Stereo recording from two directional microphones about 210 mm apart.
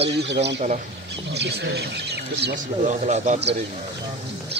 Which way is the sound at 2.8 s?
35° right (ahead or behind).